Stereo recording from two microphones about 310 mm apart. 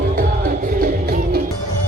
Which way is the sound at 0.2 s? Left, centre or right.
Right.